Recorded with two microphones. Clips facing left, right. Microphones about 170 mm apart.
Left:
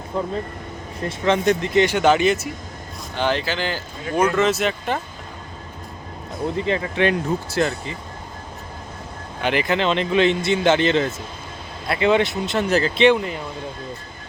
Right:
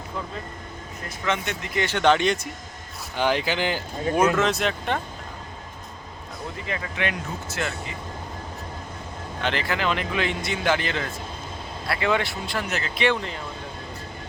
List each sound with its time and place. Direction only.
0.1 s speech: 35° left (ahead or behind)
1.8 s speech: 10° left (ahead or behind)
3.2 s speech: 10° right (ahead or behind)
4.4 s speech: centre (ahead or behind)
6.6 s speech: 30° left (ahead or behind)
9.4 s speech: 15° left (ahead or behind)
9.7 s speech: 25° left (ahead or behind)
13.1 s speech: 10° left (ahead or behind)